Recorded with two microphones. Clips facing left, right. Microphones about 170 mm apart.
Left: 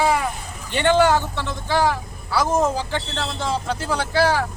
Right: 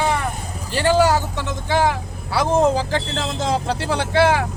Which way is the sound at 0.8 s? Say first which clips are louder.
Even; 5° right (ahead or behind).